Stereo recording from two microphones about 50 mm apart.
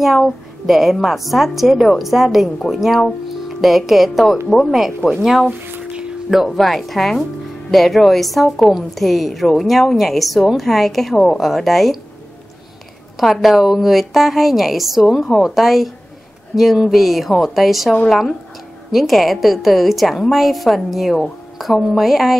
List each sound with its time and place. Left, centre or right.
0.0 s a woman's voice: centre
5.8 s a sound: centre
6.3 s a woman's voice: centre
13.2 s a woman's voice: centre